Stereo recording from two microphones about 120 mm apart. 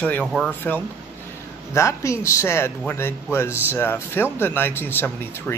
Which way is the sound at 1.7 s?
25° left (ahead or behind).